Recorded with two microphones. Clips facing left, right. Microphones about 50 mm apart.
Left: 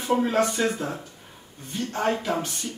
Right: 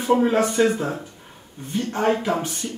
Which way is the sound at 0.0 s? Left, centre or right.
Centre.